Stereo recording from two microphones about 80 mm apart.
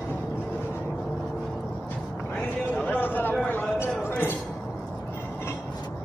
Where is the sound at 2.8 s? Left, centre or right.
Left.